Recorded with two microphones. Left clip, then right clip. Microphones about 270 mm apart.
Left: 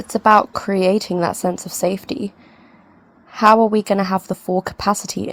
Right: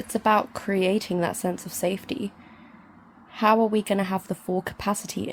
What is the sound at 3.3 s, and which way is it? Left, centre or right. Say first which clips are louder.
Speech: left 8 dB; left.